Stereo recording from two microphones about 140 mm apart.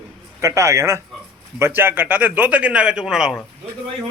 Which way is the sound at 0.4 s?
20° right (ahead or behind).